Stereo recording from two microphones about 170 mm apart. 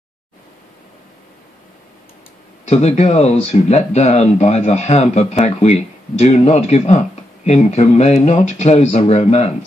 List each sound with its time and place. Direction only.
2.6 s speech: 40° left (ahead or behind)